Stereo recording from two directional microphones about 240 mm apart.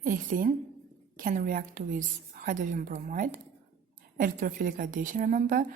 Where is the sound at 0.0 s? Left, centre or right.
Right.